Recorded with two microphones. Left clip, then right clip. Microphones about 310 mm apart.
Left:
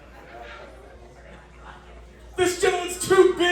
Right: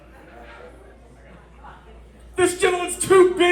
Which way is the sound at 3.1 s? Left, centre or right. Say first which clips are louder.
Right 3 dB; right.